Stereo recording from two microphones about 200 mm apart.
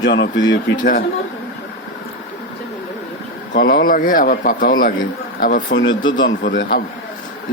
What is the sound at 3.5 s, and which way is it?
Speech, 45° left (ahead or behind).